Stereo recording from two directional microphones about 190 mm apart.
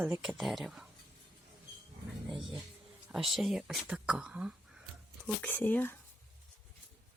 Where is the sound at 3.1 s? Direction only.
Centre (ahead or behind).